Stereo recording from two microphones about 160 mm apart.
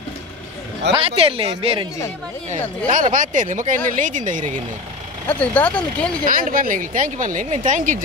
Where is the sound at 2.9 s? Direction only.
55° right (ahead or behind).